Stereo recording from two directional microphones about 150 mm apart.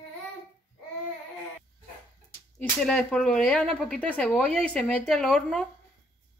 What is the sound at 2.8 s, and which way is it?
Speech, 5° left (ahead or behind).